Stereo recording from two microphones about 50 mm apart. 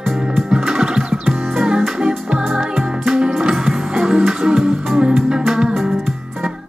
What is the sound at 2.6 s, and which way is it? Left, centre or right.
Music, centre.